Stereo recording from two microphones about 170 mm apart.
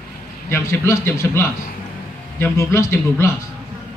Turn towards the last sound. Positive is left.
turn(degrees=15)  # may be behind; listen again after turning